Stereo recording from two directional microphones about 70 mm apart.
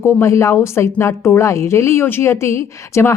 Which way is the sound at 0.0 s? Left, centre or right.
Left.